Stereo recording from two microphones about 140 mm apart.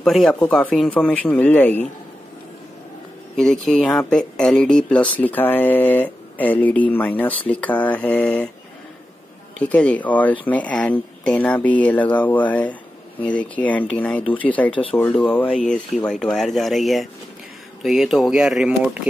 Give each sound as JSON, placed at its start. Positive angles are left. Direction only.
{"t": 0.0, "sound": "speech", "side_deg": 0}
{"t": 3.3, "sound": "speech", "side_deg": 0}
{"t": 9.6, "sound": "speech", "side_deg": 10}
{"t": 14.7, "sound": "speech", "side_deg": 40}
{"t": 15.0, "sound": "speech", "side_deg": 10}